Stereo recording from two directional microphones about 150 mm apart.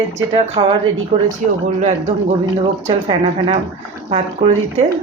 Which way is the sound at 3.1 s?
35° right (ahead or behind).